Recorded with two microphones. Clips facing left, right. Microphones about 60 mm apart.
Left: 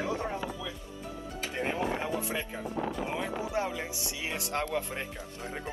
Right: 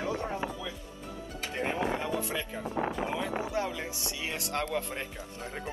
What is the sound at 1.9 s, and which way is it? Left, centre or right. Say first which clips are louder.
Speech: even; centre.